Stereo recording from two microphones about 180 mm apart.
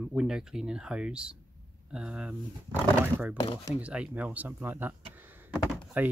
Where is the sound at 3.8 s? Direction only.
5° right (ahead or behind).